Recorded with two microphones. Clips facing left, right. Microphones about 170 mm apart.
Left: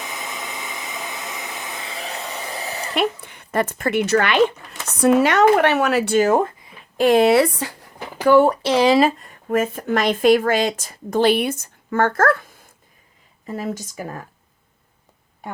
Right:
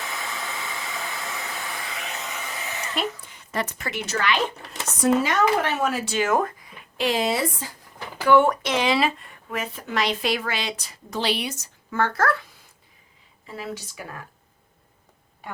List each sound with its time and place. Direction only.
0.0 s hair dryer: 20° left (ahead or behind); by 2.9 s 35° left (ahead or behind)
2.9 s speech: 65° left (ahead or behind)
6.1 s speech: 35° left (ahead or behind)
6.9 s speech: 50° left (ahead or behind); by 7.9 s 70° left (ahead or behind)
8.2 s speech: 40° left (ahead or behind)